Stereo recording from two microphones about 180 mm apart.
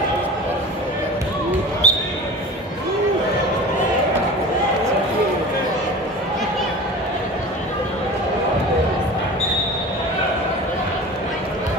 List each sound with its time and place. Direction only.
1.8 s basketball bounce: 35° left (ahead or behind)